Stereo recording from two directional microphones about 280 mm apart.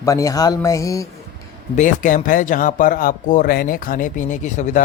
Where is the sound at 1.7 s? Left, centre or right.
Left.